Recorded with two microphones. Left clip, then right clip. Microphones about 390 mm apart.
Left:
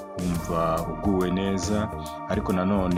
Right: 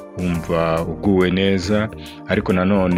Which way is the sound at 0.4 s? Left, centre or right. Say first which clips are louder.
Right 6 dB; left.